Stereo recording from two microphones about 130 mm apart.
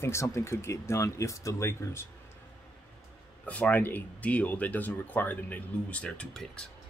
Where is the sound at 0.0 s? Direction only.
20° left (ahead or behind).